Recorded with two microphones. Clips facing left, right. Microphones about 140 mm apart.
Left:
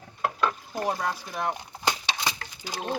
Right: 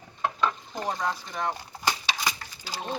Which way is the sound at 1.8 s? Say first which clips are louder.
Even; 20° left (ahead or behind).